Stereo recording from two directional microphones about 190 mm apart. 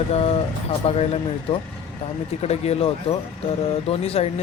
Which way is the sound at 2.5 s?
35° left (ahead or behind).